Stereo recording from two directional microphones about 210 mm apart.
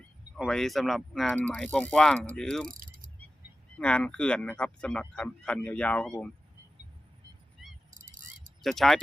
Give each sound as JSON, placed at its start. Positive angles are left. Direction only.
{"t": 0.3, "sound": "speech", "side_deg": 0}
{"t": 2.6, "sound": "mechanisms", "side_deg": -40}
{"t": 3.8, "sound": "speech", "side_deg": 5}
{"t": 8.6, "sound": "speech", "side_deg": 0}